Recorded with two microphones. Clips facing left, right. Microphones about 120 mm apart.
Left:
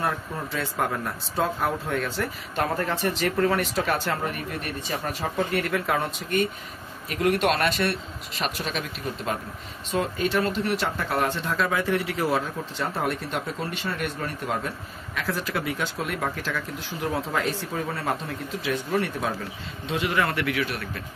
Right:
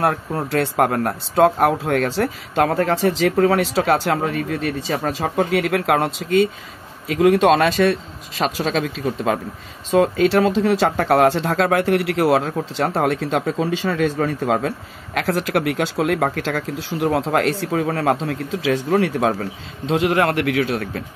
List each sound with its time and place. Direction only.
0.0 s speech: 80° right
15.1 s speech: 75° right (ahead or behind)